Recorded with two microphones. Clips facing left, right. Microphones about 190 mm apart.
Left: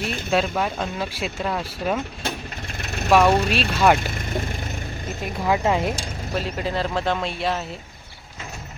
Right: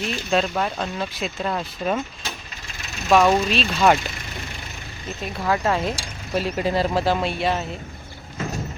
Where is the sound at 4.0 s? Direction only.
50° left (ahead or behind).